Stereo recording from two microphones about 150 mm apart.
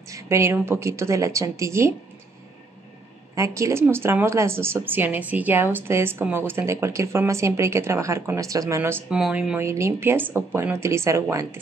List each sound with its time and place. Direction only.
0.1 s a woman's voice: 20° right (ahead or behind)
3.3 s speech: 20° right (ahead or behind)
9.1 s speech: 5° right (ahead or behind)
9.6 s speech: 20° right (ahead or behind)